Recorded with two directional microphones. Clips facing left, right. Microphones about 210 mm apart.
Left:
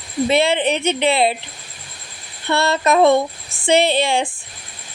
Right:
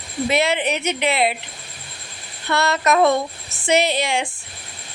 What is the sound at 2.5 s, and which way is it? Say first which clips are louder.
A woman's voice: left 2 dB; 30° left (ahead or behind).